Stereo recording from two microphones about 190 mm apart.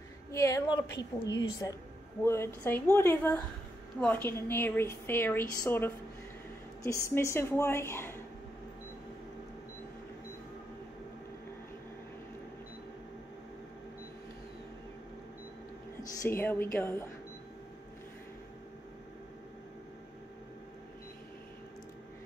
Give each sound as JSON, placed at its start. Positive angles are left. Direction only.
{"t": 0.3, "sound": "a woman's voice", "side_deg": 15}
{"t": 0.9, "sound": "a woman's voice", "side_deg": 70}
{"t": 2.2, "sound": "a woman's voice", "side_deg": 15}
{"t": 16.2, "sound": "a woman's voice", "side_deg": 10}